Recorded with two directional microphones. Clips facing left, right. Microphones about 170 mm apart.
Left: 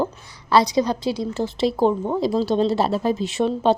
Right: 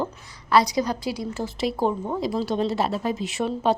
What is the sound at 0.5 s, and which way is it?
A woman's voice, 25° left (ahead or behind).